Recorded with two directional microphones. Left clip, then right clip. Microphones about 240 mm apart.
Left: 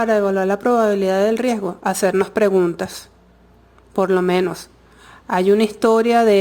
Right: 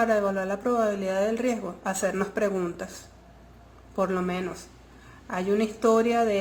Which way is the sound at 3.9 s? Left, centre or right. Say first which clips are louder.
Left 11 dB; left.